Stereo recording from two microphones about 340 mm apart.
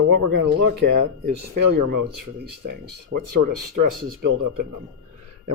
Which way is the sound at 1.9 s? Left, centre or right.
Right.